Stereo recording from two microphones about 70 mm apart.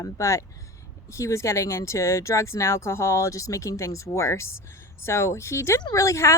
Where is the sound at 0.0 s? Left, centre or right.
Left.